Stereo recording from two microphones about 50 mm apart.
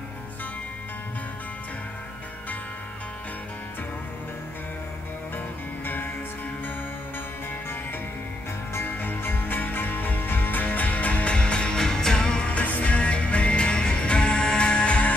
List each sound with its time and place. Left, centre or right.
8.7 s music: left